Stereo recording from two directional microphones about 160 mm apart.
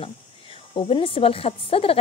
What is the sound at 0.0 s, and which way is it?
Speech, 35° left (ahead or behind).